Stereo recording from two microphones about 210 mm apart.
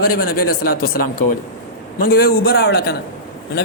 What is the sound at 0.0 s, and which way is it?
A man's voice, 45° left (ahead or behind).